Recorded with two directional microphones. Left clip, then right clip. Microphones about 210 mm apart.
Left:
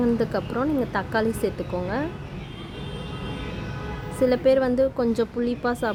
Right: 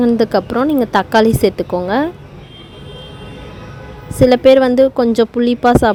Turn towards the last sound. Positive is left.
turn(degrees=-40)  # may be behind; listen again after turning